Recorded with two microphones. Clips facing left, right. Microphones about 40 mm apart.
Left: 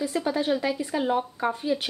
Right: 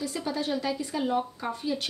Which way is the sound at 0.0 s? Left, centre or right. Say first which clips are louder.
Left 5 dB; left.